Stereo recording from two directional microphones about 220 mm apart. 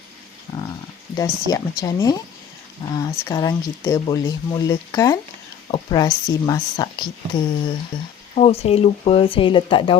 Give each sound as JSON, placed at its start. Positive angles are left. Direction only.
{"t": 1.1, "sound": "speech", "side_deg": 15}